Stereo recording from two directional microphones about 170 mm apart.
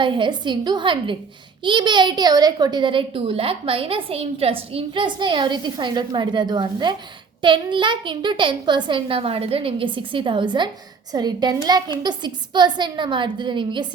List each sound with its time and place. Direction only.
0.0 s a child's voice: 30° right (ahead or behind)